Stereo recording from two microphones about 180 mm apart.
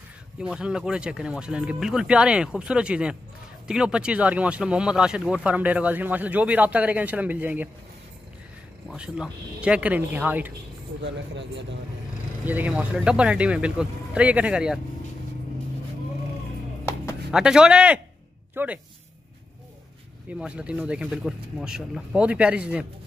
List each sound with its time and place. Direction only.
0.4 s speech: 5° right (ahead or behind)
8.9 s speech: 5° right (ahead or behind)
11.0 s speech: 80° right
12.4 s speech: 10° right (ahead or behind)
17.3 s speech: 5° right (ahead or behind)
20.2 s speech: 5° right (ahead or behind)